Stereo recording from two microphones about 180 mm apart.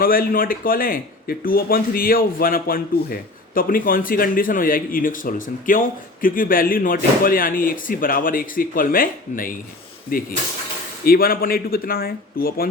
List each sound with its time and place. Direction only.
0.0 s speech: 55° left (ahead or behind)